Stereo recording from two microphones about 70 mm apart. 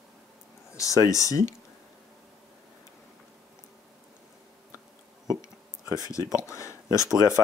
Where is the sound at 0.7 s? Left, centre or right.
Left.